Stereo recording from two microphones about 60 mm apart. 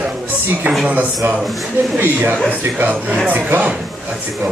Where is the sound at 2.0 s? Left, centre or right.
Right.